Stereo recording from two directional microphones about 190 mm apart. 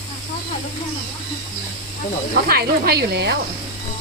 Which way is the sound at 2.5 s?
55° right (ahead or behind).